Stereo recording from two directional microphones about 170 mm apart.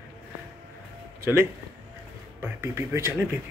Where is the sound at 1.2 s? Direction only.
15° right (ahead or behind).